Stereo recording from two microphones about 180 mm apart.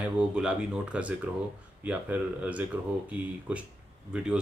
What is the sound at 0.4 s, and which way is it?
Speech, 5° right (ahead or behind).